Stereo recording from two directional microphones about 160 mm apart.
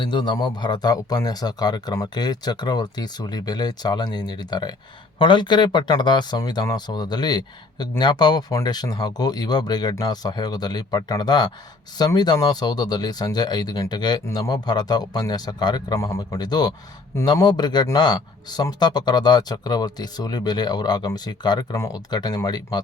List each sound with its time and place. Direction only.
0.0 s speech: 30° left (ahead or behind)